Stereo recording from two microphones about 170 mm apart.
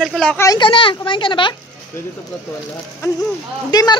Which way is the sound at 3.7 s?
25° left (ahead or behind).